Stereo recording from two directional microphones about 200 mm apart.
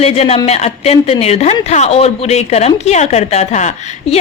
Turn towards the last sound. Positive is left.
turn(degrees=35)  # may be behind; listen again after turning